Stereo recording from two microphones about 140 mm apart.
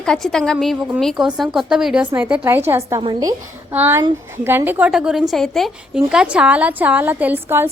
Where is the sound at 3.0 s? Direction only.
30° right (ahead or behind).